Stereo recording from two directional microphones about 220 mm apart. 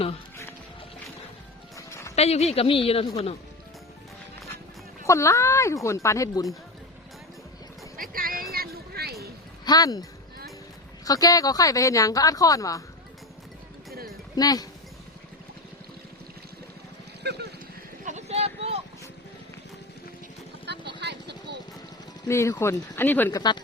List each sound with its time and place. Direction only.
1.7 s music: 15° left (ahead or behind)
2.1 s a woman's voice: 30° left (ahead or behind)
5.0 s speech: 15° left (ahead or behind)
8.1 s music: 40° right (ahead or behind)
8.5 s a sound: 45° right (ahead or behind)
9.6 s speech: 15° left (ahead or behind)
14.3 s speech: 15° left (ahead or behind)
17.2 s boat: 50° right (ahead or behind)
18.0 s a sound: 30° right (ahead or behind)
20.7 s vehicle: 50° right (ahead or behind)
22.3 s speech: 15° left (ahead or behind)